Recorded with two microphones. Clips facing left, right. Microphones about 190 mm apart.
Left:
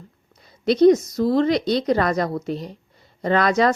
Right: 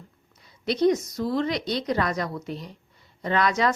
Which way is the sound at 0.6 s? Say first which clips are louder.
Left 7 dB; 35° left (ahead or behind).